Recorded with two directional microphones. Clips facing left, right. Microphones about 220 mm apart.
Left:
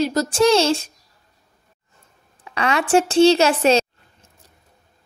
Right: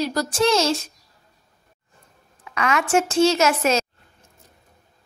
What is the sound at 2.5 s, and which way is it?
A woman's voice, 30° left (ahead or behind).